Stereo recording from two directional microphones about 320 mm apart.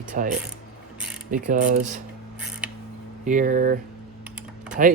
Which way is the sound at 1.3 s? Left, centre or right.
Right.